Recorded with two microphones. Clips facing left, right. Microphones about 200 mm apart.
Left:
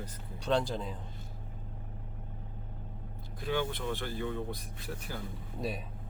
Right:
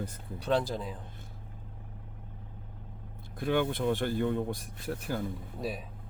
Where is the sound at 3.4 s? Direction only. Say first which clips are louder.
Right 5 dB; 55° right (ahead or behind).